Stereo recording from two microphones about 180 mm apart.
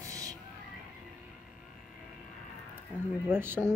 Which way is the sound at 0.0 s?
20° right (ahead or behind).